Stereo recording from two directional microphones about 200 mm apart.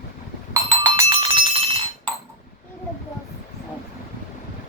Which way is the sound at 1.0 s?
25° right (ahead or behind).